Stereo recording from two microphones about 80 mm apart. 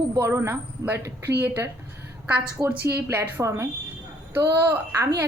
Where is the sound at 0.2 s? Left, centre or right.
Right.